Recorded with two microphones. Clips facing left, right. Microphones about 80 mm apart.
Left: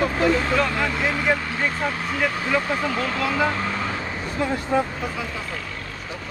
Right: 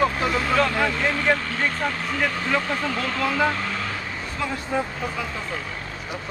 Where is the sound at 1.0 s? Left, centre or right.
Centre.